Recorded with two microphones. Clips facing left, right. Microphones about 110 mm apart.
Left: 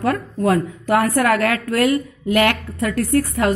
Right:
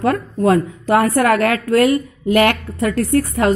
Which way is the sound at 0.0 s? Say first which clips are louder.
Right 3 dB; 30° right (ahead or behind).